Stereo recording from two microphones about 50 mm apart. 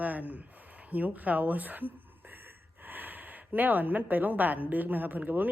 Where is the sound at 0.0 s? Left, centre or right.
Right.